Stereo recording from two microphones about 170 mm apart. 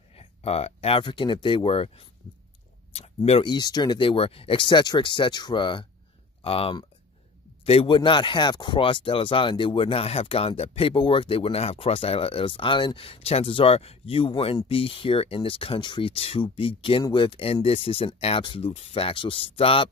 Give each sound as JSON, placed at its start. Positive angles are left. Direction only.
{"t": 0.1, "sound": "speech", "side_deg": 35}
{"t": 3.3, "sound": "speech", "side_deg": 30}